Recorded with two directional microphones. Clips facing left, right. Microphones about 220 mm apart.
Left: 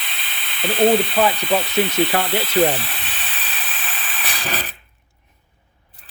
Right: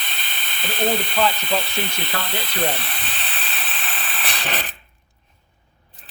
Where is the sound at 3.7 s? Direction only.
Centre (ahead or behind).